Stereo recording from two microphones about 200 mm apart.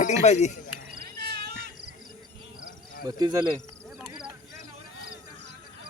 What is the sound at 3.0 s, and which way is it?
Speech, 20° right (ahead or behind).